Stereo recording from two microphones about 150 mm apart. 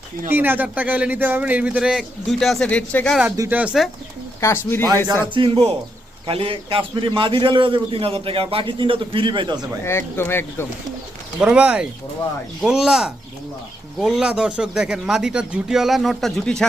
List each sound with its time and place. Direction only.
0.3 s a man's voice: 15° right (ahead or behind); by 3.2 s 5° left (ahead or behind)
3.5 s a man's voice: 10° right (ahead or behind)
4.4 s speech: 15° left (ahead or behind)
5.2 s a man's voice: 35° right (ahead or behind)
9.8 s speech: 15° left (ahead or behind)
11.3 s a man's voice: 5° right (ahead or behind)